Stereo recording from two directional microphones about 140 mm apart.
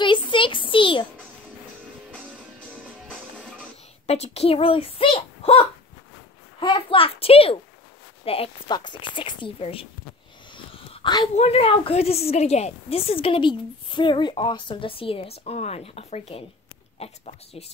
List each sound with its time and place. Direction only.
0.0 s a sound: 35° left (ahead or behind)
2.1 s music: 10° right (ahead or behind)
3.1 s music: 5° left (ahead or behind)
4.1 s a child's voice: 50° left (ahead or behind)
6.6 s a sound: 40° left (ahead or behind)
8.3 s speech: 45° left (ahead or behind)
10.5 s wheeze: 40° left (ahead or behind)
11.3 s a woman's voice: 45° left (ahead or behind)